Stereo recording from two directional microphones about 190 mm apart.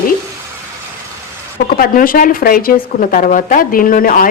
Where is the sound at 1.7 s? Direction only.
50° left (ahead or behind).